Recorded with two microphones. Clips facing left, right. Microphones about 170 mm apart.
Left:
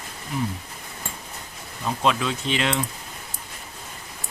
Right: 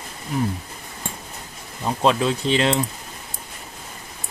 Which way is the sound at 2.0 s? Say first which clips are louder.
Right 5 dB; 35° right (ahead or behind).